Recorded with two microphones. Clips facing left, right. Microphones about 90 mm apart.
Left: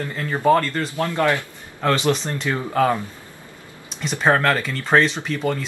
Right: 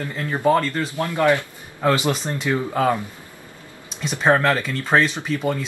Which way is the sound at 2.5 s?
5° right (ahead or behind).